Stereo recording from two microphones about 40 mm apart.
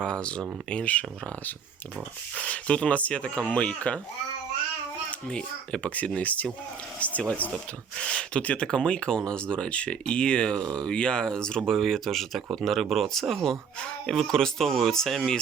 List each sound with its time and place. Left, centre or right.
0.0 s speech: left
2.3 s speech: left
5.3 s speech: left
6.1 s speech: left
7.5 s speech: centre
11.6 s speech: centre